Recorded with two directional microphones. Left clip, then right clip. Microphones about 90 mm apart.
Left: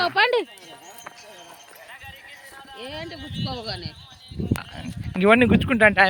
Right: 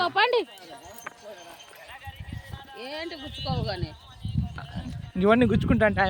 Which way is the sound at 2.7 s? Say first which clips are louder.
Even; 55° left (ahead or behind).